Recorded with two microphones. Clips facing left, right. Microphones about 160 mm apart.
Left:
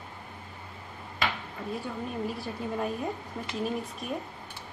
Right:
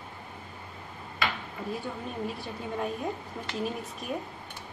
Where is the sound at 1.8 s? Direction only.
Centre (ahead or behind).